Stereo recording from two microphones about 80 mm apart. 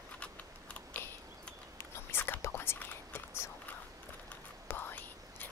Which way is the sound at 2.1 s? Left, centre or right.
Left.